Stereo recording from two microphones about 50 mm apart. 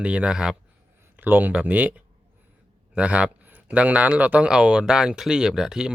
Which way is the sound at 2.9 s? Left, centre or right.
Right.